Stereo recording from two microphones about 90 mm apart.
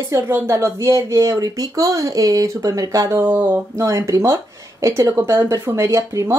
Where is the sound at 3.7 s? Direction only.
40° right (ahead or behind).